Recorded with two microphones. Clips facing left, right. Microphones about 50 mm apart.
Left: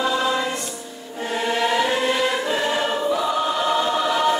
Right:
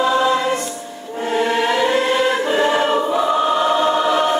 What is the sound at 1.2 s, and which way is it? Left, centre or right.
Music, right.